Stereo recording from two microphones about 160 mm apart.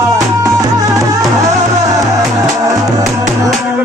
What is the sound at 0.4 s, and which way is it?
Music, 20° right (ahead or behind).